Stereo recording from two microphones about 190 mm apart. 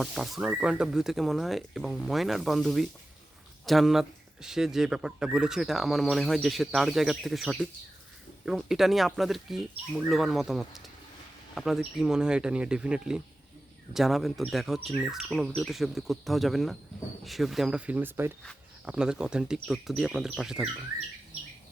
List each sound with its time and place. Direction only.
0.0 s speech: centre (ahead or behind)